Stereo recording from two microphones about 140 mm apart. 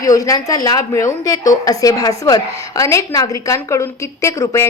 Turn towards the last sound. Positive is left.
turn(degrees=20)  # may be behind; listen again after turning